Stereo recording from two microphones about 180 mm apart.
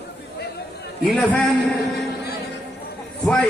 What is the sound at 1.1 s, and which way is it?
Speech, centre (ahead or behind).